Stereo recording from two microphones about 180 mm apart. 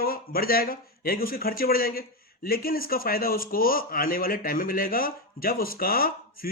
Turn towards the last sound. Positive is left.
turn(degrees=55)  # may be behind; listen again after turning